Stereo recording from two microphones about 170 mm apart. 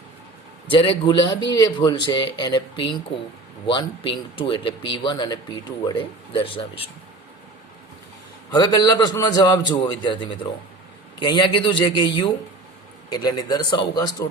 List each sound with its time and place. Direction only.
0.7 s speech: 30° left (ahead or behind)
8.4 s speech: 25° left (ahead or behind)